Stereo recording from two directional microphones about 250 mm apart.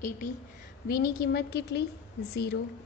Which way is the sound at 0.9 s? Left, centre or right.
Left.